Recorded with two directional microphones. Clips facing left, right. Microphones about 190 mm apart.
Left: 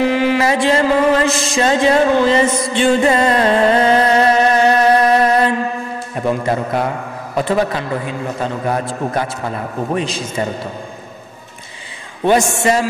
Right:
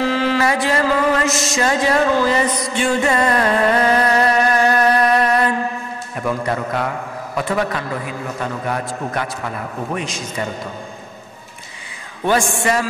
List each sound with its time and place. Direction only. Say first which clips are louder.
0.0 s a sound: left 3 dB; 15° left (ahead or behind)
6.1 s a man's voice: left 4 dB; 25° left (ahead or behind)
12.3 s a man's voice: left 4 dB; 20° left (ahead or behind)